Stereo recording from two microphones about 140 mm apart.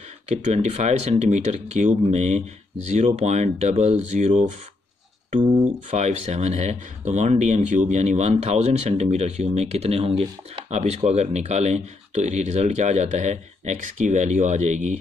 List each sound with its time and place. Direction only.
0.4 s speech: 55° right (ahead or behind)
5.9 s speech: 55° right (ahead or behind)